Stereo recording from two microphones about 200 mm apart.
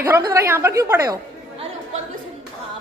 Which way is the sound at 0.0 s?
15° right (ahead or behind).